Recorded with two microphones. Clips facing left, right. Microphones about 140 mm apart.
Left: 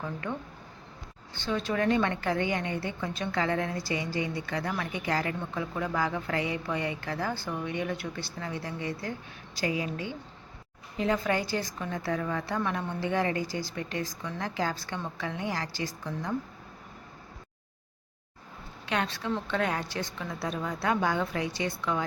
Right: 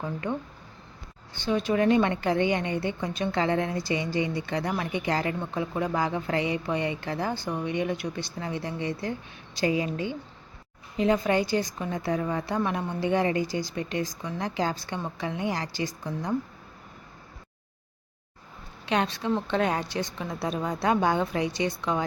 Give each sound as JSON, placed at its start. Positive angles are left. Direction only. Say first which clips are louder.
{"t": 0.0, "sound": "a woman's voice", "louder": "right 4 dB", "side_deg": -20}
{"t": 18.9, "sound": "a woman's voice", "louder": "right 4 dB", "side_deg": -20}